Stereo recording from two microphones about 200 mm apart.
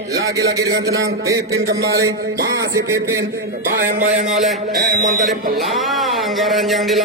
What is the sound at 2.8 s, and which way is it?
A man's voice, 55° right (ahead or behind).